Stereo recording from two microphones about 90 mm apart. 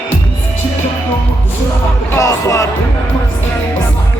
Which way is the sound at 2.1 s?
35° left (ahead or behind).